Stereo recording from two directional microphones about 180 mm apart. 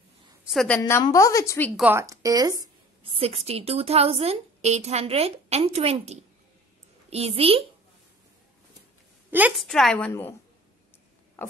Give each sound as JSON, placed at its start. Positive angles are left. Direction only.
{"t": 0.5, "sound": "a woman's voice", "side_deg": 5}
{"t": 1.8, "sound": "a woman's voice", "side_deg": -10}
{"t": 2.6, "sound": "a woman's voice", "side_deg": -30}
{"t": 9.3, "sound": "a woman's voice", "side_deg": -10}
{"t": 9.7, "sound": "a woman's voice", "side_deg": 5}
{"t": 11.4, "sound": "a sound", "side_deg": 10}